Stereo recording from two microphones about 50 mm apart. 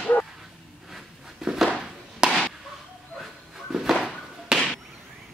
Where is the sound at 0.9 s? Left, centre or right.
Centre.